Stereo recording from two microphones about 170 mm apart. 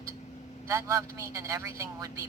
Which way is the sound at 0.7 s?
15° right (ahead or behind).